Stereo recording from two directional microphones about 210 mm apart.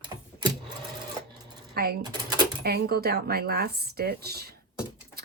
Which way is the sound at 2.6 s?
50° right (ahead or behind).